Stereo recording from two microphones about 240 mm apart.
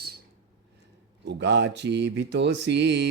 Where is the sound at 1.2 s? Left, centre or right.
Right.